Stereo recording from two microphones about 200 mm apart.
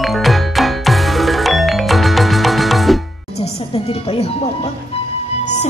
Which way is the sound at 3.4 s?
30° left (ahead or behind).